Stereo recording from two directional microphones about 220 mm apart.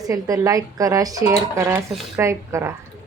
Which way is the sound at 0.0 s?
15° right (ahead or behind).